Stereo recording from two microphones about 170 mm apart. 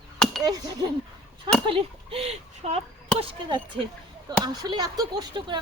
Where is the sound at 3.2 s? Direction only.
25° right (ahead or behind).